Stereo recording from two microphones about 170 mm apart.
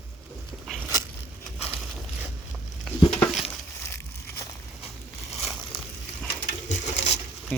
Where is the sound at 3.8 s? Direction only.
15° left (ahead or behind).